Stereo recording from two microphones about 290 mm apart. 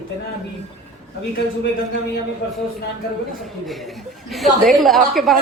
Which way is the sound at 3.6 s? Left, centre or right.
Centre.